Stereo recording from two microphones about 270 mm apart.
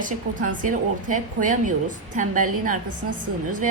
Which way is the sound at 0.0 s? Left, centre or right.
Right.